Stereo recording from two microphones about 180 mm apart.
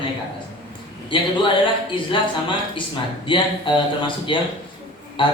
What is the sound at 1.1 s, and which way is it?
A man's voice, 25° left (ahead or behind).